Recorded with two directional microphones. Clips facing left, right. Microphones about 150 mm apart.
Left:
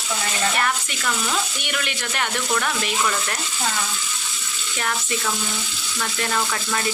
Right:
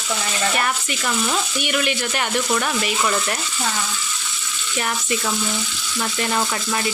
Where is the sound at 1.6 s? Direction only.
10° right (ahead or behind).